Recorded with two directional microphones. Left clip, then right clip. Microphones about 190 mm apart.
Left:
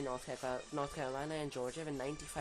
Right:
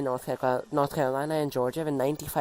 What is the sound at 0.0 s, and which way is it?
Speech, 40° right (ahead or behind).